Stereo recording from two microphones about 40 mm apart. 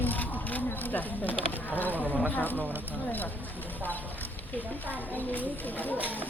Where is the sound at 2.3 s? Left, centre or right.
Left.